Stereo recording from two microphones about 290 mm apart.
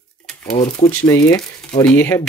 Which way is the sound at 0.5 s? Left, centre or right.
Left.